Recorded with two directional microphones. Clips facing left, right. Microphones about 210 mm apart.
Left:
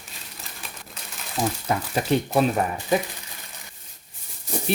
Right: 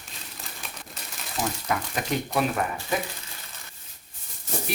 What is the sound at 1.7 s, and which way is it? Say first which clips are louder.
Speech: left 6 dB; 30° left (ahead or behind).